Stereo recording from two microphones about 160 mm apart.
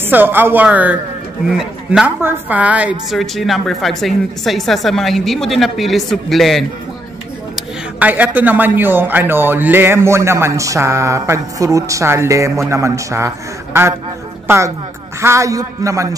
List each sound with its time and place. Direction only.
0.0 s a man's voice: 15° right (ahead or behind)
7.5 s a man's voice: 10° right (ahead or behind)
15.1 s a man's voice: 20° right (ahead or behind)